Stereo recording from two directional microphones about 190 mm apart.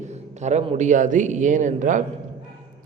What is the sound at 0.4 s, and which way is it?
A man's voice, 40° right (ahead or behind).